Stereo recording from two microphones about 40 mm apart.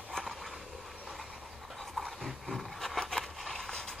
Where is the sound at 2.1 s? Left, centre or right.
Centre.